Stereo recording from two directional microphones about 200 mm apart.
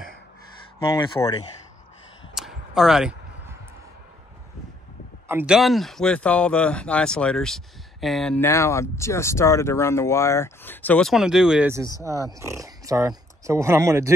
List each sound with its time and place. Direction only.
0.9 s speech: 20° left (ahead or behind)
2.3 s a sound: centre (ahead or behind)
5.3 s speech: 5° right (ahead or behind)
12.0 s speech: 15° right (ahead or behind)